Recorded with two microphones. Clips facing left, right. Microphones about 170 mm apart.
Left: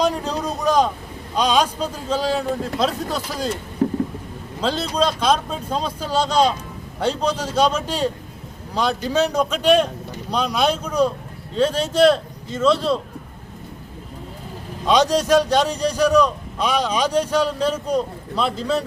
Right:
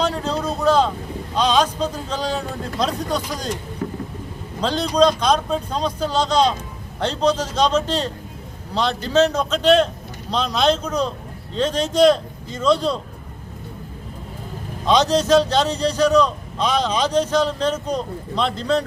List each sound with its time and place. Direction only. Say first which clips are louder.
0.0 s boat: left 1 dB; 15° left (ahead or behind)
1.4 s a man's voice: right 1 dB; 10° left (ahead or behind)
3.8 s vehicle: left 9 dB; 35° left (ahead or behind)
4.6 s a man's voice: right 4 dB; 5° left (ahead or behind)
14.8 s a man's voice: even; 10° left (ahead or behind)